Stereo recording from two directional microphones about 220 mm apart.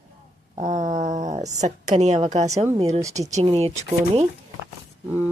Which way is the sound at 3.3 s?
30° right (ahead or behind).